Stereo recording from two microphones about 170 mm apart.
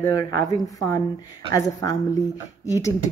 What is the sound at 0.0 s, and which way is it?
A woman's voice, 20° left (ahead or behind).